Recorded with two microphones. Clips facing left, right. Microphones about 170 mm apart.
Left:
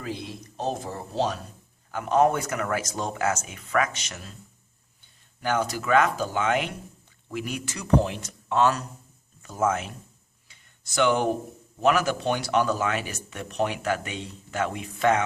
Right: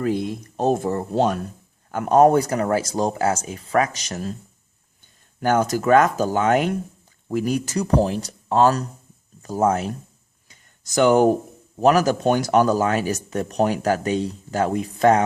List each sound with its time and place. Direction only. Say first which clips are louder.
0.0 s speech: right 11 dB; 50° right (ahead or behind)
5.4 s speech: right 7 dB; 45° right (ahead or behind)
10.5 s a sound: right 8 dB; 40° right (ahead or behind)
11.8 s speech: right 6 dB; 40° right (ahead or behind)